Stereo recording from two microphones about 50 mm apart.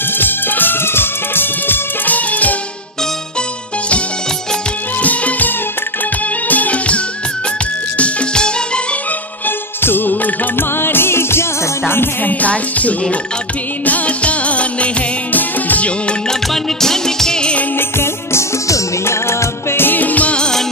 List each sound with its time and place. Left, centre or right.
0.1 s music: left
5.0 s music: left
8.0 s music: left
9.8 s music: left
12.2 s music: left
16.3 s music: centre
17.7 s music: left
19.9 s music: left
20.3 s music: centre